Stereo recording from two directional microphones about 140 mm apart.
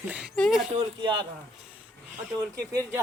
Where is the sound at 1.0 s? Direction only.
35° right (ahead or behind).